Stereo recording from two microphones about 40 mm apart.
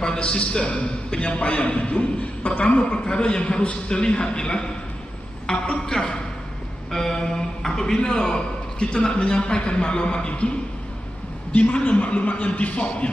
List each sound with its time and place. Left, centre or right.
0.0 s a man's voice: left
2.6 s a man's voice: left
11.5 s a man's voice: left